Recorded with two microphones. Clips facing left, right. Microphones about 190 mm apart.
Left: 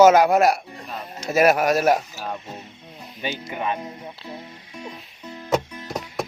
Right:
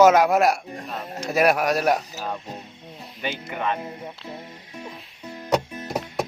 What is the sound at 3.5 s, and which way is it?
Speech, 15° left (ahead or behind).